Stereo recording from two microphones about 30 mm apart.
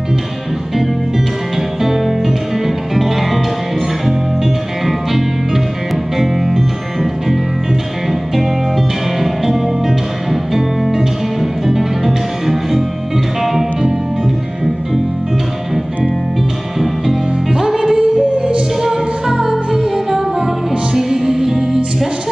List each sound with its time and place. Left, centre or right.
1.8 s music: centre
4.4 s music: centre
8.1 s music: centre
16.8 s music: centre
18.8 s music: centre